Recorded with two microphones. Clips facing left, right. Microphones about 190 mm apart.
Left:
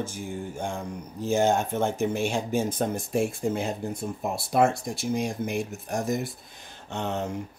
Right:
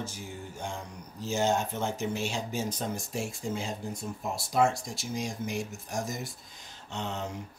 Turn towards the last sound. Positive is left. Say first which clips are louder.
# left 6 dB
turn(degrees=55)  # may be behind; listen again after turning